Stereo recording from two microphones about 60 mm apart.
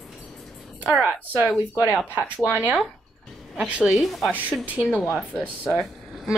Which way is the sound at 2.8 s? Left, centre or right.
Centre.